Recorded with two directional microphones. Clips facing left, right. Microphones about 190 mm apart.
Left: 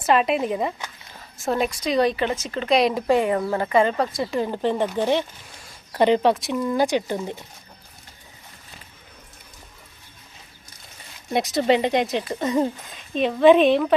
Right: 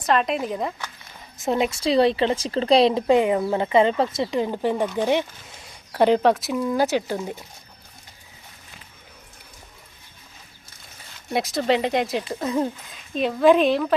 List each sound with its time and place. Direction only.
0.0 s speech: 5° left (ahead or behind)
1.4 s a woman's voice: 20° right (ahead or behind)
11.3 s speech: centre (ahead or behind)